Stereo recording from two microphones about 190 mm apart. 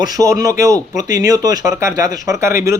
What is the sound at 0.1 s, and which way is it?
Speech, 20° right (ahead or behind).